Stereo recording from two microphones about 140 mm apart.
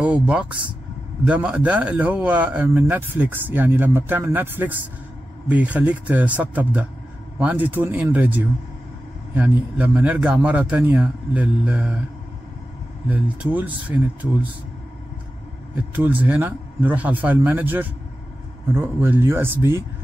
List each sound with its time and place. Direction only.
0.0 s speech: 10° right (ahead or behind)
13.1 s speech: 10° right (ahead or behind)
15.7 s speech: 10° right (ahead or behind)